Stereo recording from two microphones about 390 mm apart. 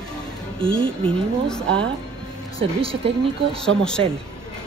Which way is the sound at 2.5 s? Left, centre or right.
Centre.